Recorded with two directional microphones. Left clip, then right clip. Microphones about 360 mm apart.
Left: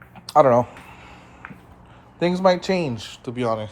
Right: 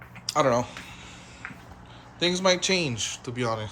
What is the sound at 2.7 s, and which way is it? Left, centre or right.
Speech, left.